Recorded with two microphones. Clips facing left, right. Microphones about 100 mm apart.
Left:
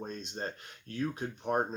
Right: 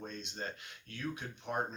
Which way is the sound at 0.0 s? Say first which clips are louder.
Left 4 dB; 40° left (ahead or behind).